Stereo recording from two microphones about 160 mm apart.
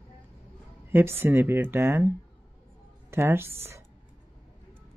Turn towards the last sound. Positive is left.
turn(degrees=-15)  # may be behind; listen again after turning